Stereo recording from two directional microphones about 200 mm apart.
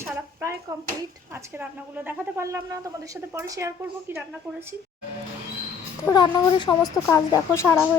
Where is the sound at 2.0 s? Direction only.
10° right (ahead or behind).